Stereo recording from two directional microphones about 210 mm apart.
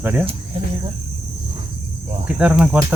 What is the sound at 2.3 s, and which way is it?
Speech, 5° right (ahead or behind).